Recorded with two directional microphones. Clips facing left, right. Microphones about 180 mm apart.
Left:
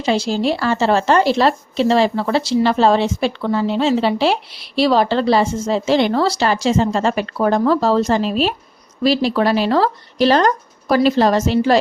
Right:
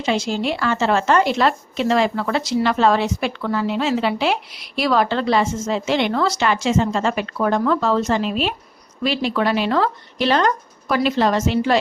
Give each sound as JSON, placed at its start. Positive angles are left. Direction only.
{"t": 0.0, "sound": "a woman's voice", "side_deg": 35}